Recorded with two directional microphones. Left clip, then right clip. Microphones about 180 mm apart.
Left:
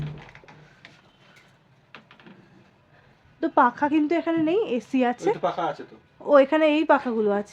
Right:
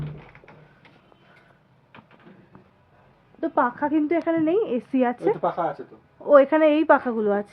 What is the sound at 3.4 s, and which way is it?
A woman's voice, 35° left (ahead or behind).